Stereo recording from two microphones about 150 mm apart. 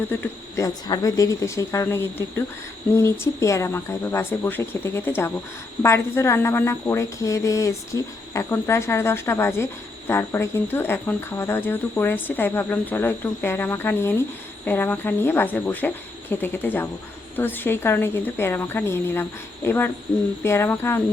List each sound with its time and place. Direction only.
0.1 s speech: 15° left (ahead or behind)
2.9 s cricket: 20° left (ahead or behind)